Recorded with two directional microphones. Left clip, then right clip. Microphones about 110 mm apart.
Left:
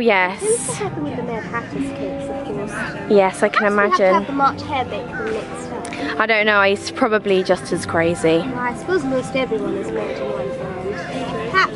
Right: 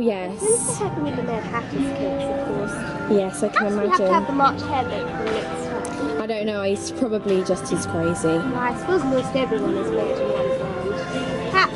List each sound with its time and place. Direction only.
0.0 s a woman's voice: 15° left (ahead or behind)
3.3 s a woman's voice: 15° left (ahead or behind)
3.6 s speech: 5° left (ahead or behind)
6.2 s a woman's voice: 15° left (ahead or behind)
8.5 s speech: 5° left (ahead or behind)
11.6 s speech: 5° left (ahead or behind)